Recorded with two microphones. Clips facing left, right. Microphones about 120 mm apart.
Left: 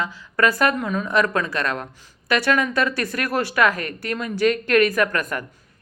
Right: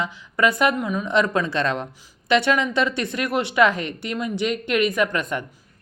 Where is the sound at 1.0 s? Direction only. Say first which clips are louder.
Right 1 dB; 25° right (ahead or behind).